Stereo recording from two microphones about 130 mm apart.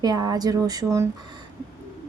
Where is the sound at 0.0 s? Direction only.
30° right (ahead or behind).